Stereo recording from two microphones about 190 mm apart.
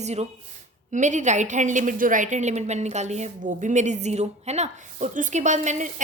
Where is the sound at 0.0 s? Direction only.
35° right (ahead or behind).